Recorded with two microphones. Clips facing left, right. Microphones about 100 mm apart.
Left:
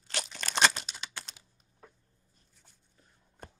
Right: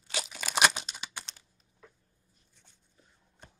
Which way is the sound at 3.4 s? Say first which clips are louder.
Left 6 dB; 50° left (ahead or behind).